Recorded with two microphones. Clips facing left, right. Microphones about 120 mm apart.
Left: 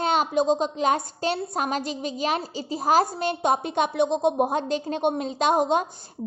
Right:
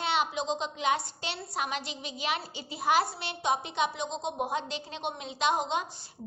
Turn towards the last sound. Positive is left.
turn(degrees=50)  # may be behind; listen again after turning